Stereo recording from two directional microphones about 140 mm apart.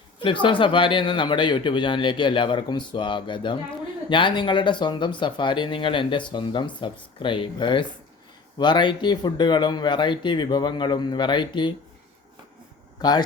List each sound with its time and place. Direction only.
0.2 s speech: 35° left (ahead or behind)
13.0 s speech: 30° left (ahead or behind)